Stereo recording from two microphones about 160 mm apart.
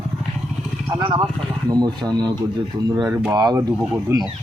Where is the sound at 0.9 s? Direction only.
30° right (ahead or behind).